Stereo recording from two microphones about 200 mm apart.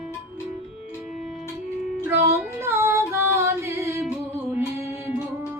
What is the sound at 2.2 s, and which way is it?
Female singing, 15° right (ahead or behind).